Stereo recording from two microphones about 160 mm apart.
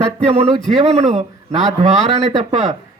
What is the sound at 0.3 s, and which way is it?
A man's voice, 40° right (ahead or behind).